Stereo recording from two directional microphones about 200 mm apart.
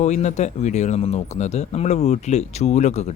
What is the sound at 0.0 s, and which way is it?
A man's voice, 35° left (ahead or behind).